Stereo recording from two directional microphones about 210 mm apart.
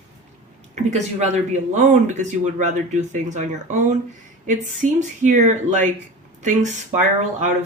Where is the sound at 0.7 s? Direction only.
30° right (ahead or behind).